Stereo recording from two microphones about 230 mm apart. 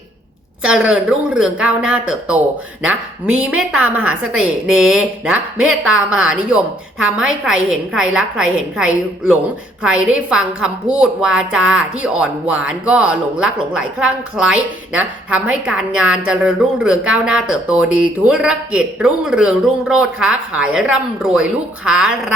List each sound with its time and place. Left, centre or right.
0.6 s a woman's voice: centre